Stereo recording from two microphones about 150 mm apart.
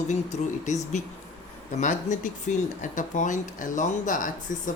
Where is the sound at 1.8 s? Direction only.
55° left (ahead or behind).